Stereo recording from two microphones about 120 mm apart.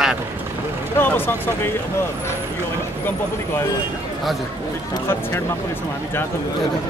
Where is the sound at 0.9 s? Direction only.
15° left (ahead or behind).